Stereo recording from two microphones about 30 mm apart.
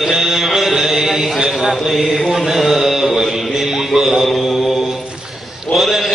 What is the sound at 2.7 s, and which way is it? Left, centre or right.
Mantra, centre.